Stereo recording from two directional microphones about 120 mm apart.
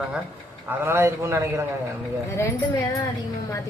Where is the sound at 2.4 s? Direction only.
20° left (ahead or behind).